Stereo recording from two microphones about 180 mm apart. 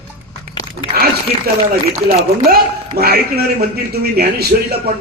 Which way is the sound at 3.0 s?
60° right (ahead or behind).